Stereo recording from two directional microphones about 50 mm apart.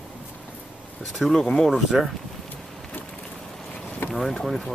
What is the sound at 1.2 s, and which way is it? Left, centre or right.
Speech, centre.